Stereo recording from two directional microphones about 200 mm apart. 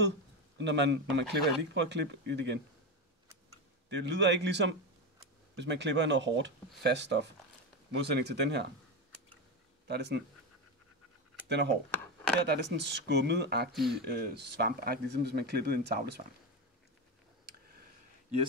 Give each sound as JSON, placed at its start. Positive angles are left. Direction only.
{"t": 0.6, "sound": "speech", "side_deg": -60}
{"t": 9.8, "sound": "speech", "side_deg": -55}
{"t": 11.4, "sound": "speech", "side_deg": -60}
{"t": 13.7, "sound": "speech", "side_deg": 0}
{"t": 14.0, "sound": "speech", "side_deg": -55}